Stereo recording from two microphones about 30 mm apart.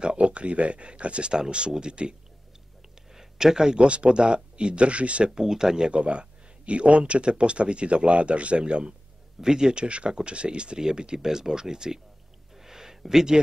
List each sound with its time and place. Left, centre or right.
0.2 s speech: right
1.3 s speech: right
3.2 s speech: centre
3.8 s speech: right
5.3 s speech: centre
5.9 s speech: right
9.4 s speech: right
12.5 s a sound: centre
13.0 s speech: centre